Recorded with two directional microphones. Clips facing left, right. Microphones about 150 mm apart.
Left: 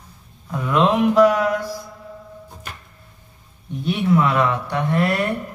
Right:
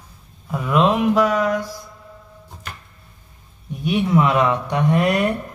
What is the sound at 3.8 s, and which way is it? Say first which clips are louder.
Speech: right 1 dB; 15° right (ahead or behind).